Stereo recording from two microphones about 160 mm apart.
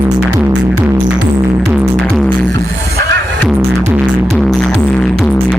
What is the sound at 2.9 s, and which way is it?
Music, 90° right.